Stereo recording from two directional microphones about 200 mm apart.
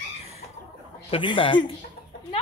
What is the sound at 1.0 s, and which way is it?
Speech, 25° left (ahead or behind).